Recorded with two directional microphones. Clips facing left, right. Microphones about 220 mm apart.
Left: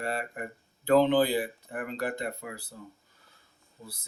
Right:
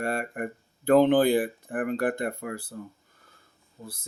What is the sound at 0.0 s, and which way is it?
Speech, 50° right (ahead or behind).